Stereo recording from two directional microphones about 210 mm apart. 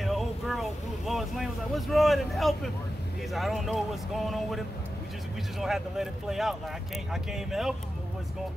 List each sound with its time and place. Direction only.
0.0 s vehicle: centre (ahead or behind)
3.3 s speech: centre (ahead or behind)